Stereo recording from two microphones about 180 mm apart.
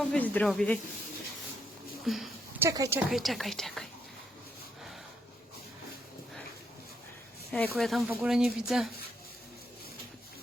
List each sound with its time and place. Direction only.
0.1 s speech: 5° left (ahead or behind)
2.0 s speech: centre (ahead or behind)
2.6 s speech: 20° right (ahead or behind)
3.1 s speech: centre (ahead or behind)
7.5 s speech: 10° left (ahead or behind)